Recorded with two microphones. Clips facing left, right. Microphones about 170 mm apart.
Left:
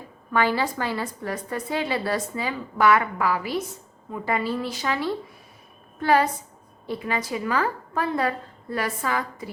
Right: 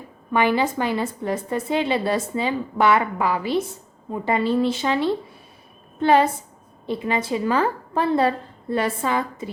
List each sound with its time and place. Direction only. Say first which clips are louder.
0.3 s a woman's voice: right 3 dB; 20° right (ahead or behind)